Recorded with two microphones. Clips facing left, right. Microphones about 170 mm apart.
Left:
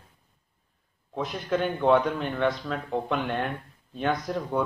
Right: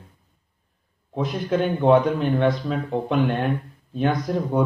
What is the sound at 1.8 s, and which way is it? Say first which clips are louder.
A man's voice: right 5 dB; 20° right (ahead or behind).